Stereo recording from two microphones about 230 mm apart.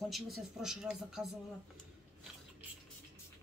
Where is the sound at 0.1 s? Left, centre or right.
Centre.